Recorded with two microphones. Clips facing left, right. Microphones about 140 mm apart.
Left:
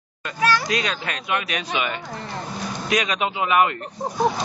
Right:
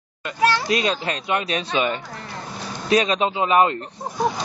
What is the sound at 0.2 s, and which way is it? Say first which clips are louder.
Speech: right 1 dB; 25° right (ahead or behind).